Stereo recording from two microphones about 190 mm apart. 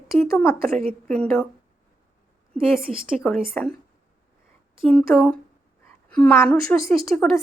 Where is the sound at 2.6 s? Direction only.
5° right (ahead or behind).